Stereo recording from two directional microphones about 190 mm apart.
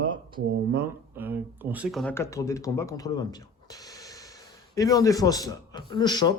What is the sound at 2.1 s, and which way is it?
Speech, 15° left (ahead or behind).